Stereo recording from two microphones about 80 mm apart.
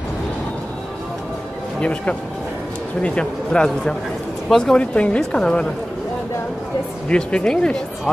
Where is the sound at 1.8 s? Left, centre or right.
Centre.